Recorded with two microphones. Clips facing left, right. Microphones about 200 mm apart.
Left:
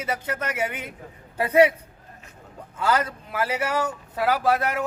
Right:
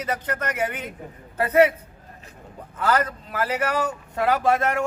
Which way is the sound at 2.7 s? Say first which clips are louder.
Right 1 dB; 10° left (ahead or behind).